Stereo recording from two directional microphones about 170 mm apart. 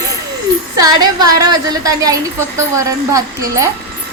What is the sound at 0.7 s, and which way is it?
A woman's voice, 20° right (ahead or behind).